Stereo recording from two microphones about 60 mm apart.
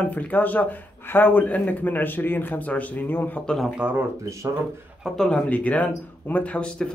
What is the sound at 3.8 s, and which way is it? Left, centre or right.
Speech, right.